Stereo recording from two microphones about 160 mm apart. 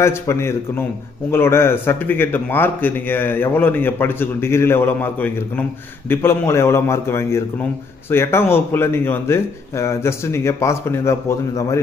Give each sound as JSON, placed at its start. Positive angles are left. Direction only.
{"t": 0.0, "sound": "speech", "side_deg": 15}